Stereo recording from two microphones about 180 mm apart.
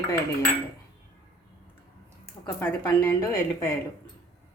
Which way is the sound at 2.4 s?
20° left (ahead or behind).